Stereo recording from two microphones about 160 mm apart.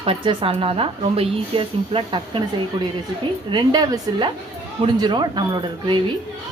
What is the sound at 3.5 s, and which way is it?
A woman's voice, 25° right (ahead or behind).